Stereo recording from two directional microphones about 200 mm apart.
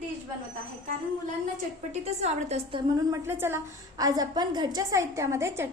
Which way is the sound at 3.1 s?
10° right (ahead or behind).